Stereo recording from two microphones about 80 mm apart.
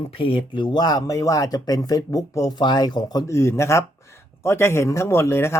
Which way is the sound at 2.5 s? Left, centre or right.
Left.